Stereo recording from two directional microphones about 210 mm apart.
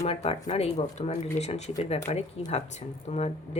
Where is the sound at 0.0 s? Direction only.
30° left (ahead or behind).